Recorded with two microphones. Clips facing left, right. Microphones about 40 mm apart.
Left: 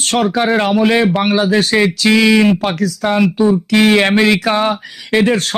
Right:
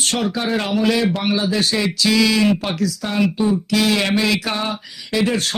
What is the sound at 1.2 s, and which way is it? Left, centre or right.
Speech, left.